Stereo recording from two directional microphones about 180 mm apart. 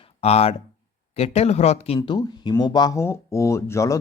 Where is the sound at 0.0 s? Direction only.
35° left (ahead or behind).